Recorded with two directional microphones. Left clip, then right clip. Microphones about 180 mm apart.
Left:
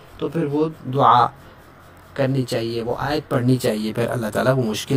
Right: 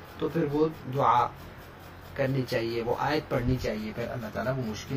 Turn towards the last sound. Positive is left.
turn(degrees=55)  # may be behind; listen again after turning